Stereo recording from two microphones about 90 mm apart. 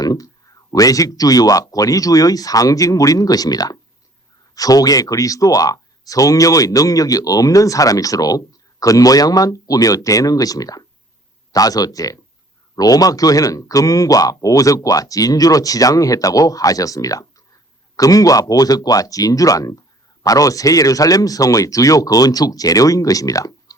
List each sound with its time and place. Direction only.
0.0 s speech: 45° left (ahead or behind)